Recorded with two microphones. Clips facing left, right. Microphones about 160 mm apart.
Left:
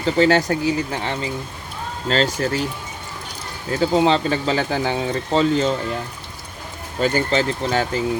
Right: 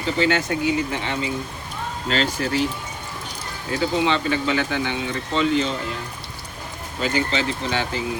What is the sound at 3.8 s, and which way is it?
Speech, 35° left (ahead or behind).